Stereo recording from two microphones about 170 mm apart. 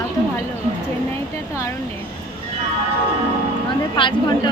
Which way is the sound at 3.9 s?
30° left (ahead or behind).